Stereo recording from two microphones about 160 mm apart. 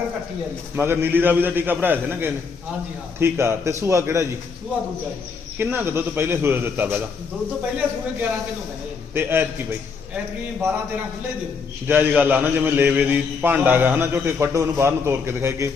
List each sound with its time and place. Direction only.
0.8 s a man's voice: 15° right (ahead or behind)
5.5 s a man's voice: 15° right (ahead or behind)
9.1 s a man's voice: 15° right (ahead or behind)
10.6 s a man's voice: 15° right (ahead or behind)
11.9 s a man's voice: 10° right (ahead or behind)